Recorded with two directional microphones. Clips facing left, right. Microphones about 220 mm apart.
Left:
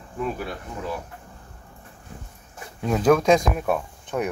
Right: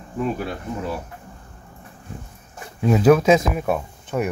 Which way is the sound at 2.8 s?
5° right (ahead or behind).